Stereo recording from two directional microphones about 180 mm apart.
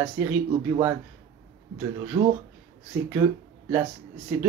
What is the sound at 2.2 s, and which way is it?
Speech, 25° right (ahead or behind).